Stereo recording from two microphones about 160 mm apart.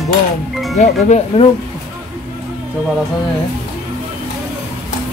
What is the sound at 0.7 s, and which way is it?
Speech, 45° left (ahead or behind).